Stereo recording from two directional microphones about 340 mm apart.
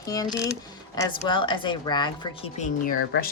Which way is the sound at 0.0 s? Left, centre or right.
Centre.